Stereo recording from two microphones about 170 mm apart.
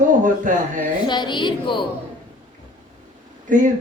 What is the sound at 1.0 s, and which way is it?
Speech, 25° left (ahead or behind).